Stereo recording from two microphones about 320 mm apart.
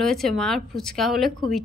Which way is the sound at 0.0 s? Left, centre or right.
Centre.